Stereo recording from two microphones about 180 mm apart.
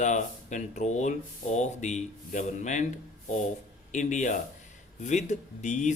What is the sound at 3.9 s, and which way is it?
Speech, 45° left (ahead or behind).